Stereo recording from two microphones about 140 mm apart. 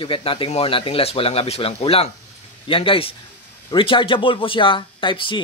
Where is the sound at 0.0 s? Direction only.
40° left (ahead or behind).